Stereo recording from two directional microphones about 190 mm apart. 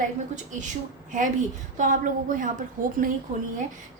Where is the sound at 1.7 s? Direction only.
45° right (ahead or behind).